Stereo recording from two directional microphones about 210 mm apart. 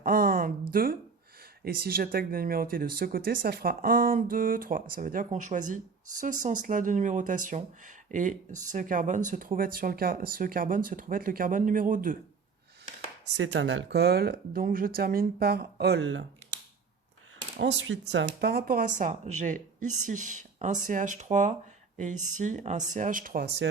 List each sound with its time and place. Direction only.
0.0 s a sound: 45° right (ahead or behind)
1.6 s speech: 45° right (ahead or behind)
13.3 s speech: 60° right (ahead or behind)
17.6 s speech: 55° right (ahead or behind)